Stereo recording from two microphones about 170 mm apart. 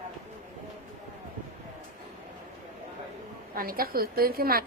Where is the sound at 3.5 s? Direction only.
60° right (ahead or behind).